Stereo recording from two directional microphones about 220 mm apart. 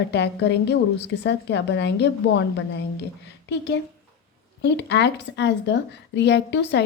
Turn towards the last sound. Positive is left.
turn(degrees=50)  # may be behind; listen again after turning